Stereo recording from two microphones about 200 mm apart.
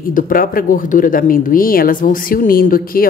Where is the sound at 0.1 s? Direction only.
45° left (ahead or behind).